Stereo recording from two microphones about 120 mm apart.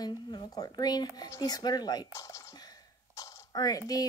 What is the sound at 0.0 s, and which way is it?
Speech, 35° left (ahead or behind).